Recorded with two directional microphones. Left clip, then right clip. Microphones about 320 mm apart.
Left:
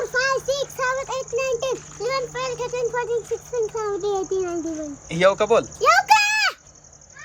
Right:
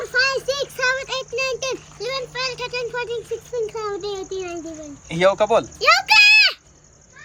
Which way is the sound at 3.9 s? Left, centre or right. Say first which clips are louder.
Left 3 dB; centre.